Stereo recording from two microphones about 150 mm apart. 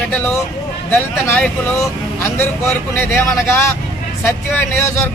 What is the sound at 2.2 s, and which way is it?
A man's voice, 15° left (ahead or behind).